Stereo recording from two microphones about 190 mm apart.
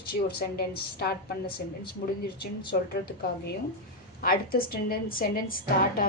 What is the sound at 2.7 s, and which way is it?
Speech, 55° left (ahead or behind).